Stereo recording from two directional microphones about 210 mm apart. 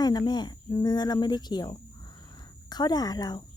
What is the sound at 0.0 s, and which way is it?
Cricket, 20° left (ahead or behind).